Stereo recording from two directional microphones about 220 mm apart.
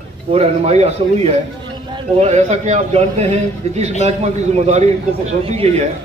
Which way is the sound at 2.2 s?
30° right (ahead or behind).